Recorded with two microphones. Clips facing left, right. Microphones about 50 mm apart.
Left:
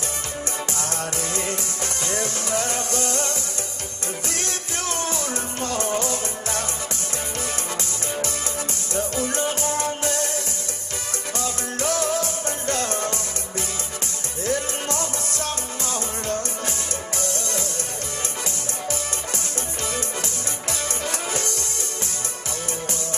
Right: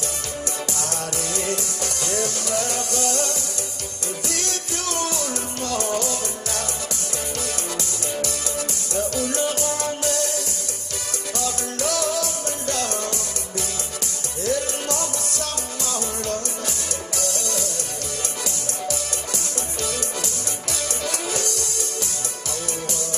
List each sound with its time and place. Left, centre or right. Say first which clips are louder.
0.8 s music: even; left
8.2 s music: right 1 dB; left
14.4 s music: right 1 dB; left
21.0 s music: right 2 dB; left